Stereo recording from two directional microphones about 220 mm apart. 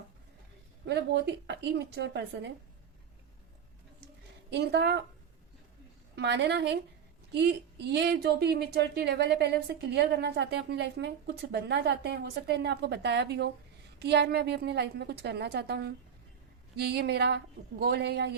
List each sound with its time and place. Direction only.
0.9 s speech: 50° right (ahead or behind)
4.4 s speech: 50° right (ahead or behind)
6.1 s speech: 50° right (ahead or behind)